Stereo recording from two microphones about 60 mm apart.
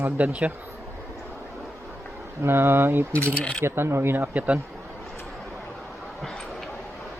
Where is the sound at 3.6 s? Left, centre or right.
Right.